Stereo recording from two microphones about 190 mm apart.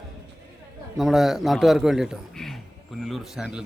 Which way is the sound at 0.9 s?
Centre (ahead or behind).